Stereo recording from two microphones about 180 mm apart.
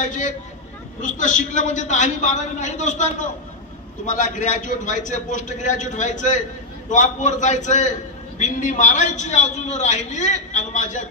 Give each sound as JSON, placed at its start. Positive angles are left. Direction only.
{"t": 0.0, "sound": "vehicle", "side_deg": 45}
{"t": 1.0, "sound": "a man's voice", "side_deg": 45}